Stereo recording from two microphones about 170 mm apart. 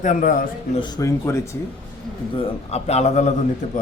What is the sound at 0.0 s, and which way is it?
Speech, 50° left (ahead or behind).